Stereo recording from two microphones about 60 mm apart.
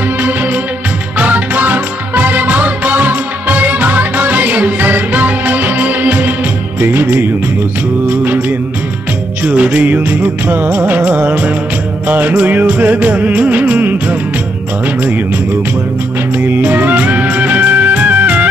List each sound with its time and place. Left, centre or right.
1.1 s music: right
6.8 s music: right
16.3 s music: right